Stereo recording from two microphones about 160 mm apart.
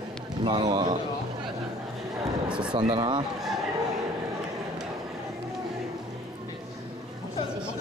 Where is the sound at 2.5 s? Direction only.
5° right (ahead or behind).